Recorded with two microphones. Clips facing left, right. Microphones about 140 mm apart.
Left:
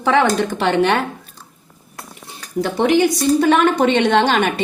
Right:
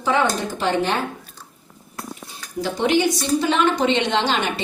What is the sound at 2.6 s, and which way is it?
A woman's voice, 60° left (ahead or behind).